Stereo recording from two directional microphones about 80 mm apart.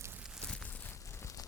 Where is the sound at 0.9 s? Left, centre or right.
Left.